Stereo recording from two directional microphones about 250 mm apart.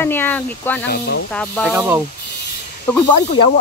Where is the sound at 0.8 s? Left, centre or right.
Left.